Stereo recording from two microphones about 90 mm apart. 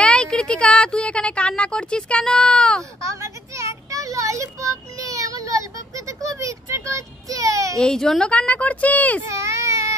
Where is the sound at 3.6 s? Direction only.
35° right (ahead or behind).